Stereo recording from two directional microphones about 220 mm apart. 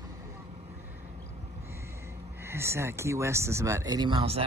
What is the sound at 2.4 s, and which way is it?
Speech, 10° right (ahead or behind).